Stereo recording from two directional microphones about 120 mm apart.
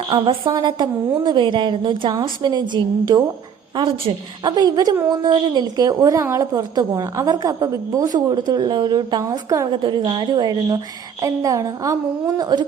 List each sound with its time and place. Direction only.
0.1 s a woman's voice: 45° right (ahead or behind)
3.8 s a woman's voice: 45° right (ahead or behind)
4.5 s a woman's voice: 35° right (ahead or behind)
9.7 s a woman's voice: 45° right (ahead or behind)